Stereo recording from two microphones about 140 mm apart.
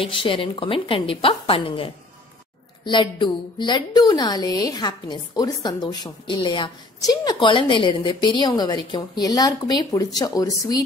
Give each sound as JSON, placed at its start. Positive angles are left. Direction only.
{"t": 0.0, "sound": "a woman's voice", "side_deg": 40}